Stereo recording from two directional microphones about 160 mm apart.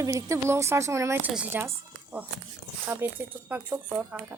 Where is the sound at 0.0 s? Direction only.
20° right (ahead or behind).